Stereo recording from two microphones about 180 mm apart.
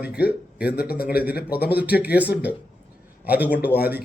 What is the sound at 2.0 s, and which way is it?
Speech, 10° right (ahead or behind).